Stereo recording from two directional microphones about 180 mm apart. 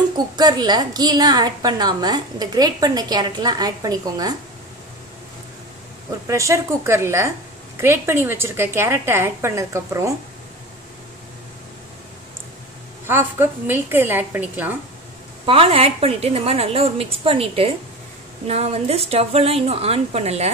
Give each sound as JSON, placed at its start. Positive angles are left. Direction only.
{"t": 0.4, "sound": "a woman's voice", "side_deg": -25}
{"t": 6.2, "sound": "a woman's voice", "side_deg": -15}
{"t": 13.0, "sound": "a woman's voice", "side_deg": -15}
{"t": 15.4, "sound": "a woman's voice", "side_deg": -30}